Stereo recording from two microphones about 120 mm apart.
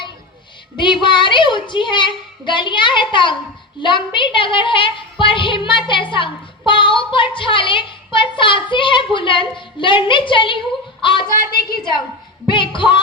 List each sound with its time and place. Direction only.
1.0 s a woman's voice: 40° left (ahead or behind)
12.5 s a woman's voice: 40° left (ahead or behind)